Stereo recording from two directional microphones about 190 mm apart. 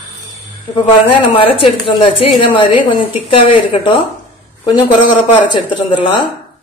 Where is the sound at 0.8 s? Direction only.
30° left (ahead or behind).